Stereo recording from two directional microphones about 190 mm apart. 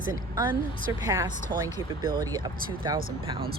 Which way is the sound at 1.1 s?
20° right (ahead or behind).